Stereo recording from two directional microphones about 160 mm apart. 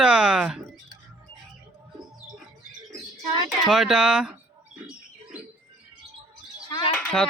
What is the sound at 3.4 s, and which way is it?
Speech, centre (ahead or behind).